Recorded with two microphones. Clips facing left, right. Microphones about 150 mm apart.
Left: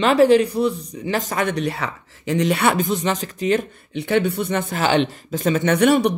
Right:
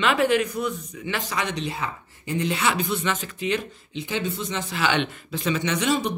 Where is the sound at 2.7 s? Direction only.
40° left (ahead or behind).